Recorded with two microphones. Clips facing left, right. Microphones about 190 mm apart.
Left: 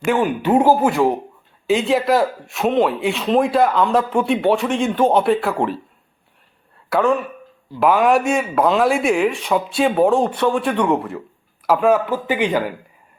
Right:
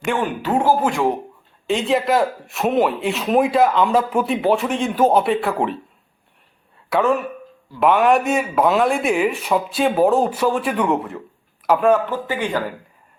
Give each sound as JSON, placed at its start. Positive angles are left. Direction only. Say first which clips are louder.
{"t": 0.0, "sound": "speech", "louder": "left 4 dB", "side_deg": 5}
{"t": 0.4, "sound": "speech", "louder": "left 3 dB", "side_deg": 15}
{"t": 6.9, "sound": "speech", "louder": "left 1 dB", "side_deg": 0}